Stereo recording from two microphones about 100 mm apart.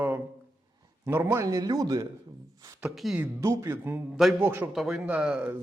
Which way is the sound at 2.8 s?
Centre (ahead or behind).